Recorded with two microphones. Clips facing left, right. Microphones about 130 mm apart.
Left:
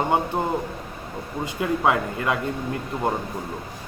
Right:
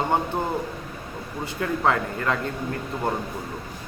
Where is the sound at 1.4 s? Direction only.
15° left (ahead or behind).